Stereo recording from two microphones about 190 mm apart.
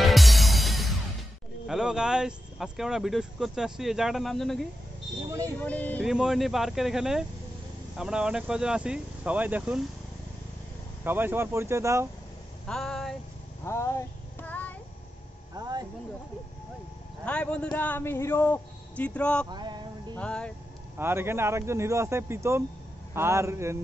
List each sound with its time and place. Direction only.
0.0 s music: centre (ahead or behind)
1.7 s speech: 5° right (ahead or behind)
5.6 s a man's voice: 10° left (ahead or behind)
6.0 s speech: 5° right (ahead or behind)
11.1 s speech: 10° right (ahead or behind)
12.6 s speech: centre (ahead or behind)
13.7 s a sound: 15° left (ahead or behind)
15.5 s a sound: 20° right (ahead or behind)
17.2 s a man's voice: 5° left (ahead or behind)
19.5 s music: 25° right (ahead or behind)
20.2 s speech: 5° left (ahead or behind)
21.0 s speech: 10° right (ahead or behind)